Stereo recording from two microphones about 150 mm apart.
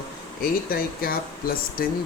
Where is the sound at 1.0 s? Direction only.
80° left.